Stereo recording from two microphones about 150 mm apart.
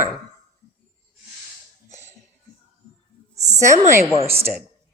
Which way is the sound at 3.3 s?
20° right (ahead or behind).